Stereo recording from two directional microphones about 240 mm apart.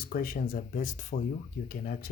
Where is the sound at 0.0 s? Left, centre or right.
Left.